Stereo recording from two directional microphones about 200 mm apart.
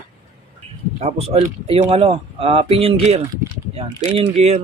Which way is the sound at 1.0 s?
30° right (ahead or behind).